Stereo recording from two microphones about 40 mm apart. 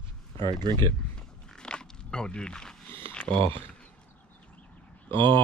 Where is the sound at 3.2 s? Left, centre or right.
Left.